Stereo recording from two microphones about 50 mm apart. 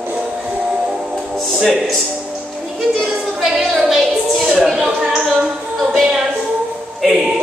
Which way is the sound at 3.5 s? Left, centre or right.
Centre.